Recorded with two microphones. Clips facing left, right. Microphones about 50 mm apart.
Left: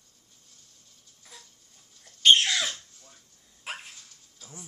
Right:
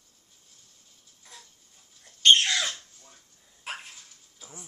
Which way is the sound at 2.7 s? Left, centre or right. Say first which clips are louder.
Even; centre.